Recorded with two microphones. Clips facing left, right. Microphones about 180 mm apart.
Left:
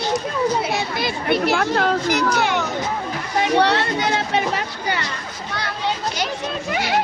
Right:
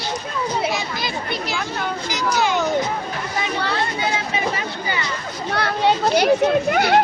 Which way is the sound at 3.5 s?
70° left (ahead or behind).